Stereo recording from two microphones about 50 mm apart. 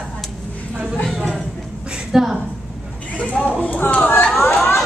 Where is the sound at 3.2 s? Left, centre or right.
Left.